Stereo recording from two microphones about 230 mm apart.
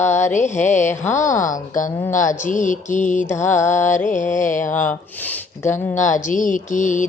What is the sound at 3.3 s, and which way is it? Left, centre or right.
Child singing, centre.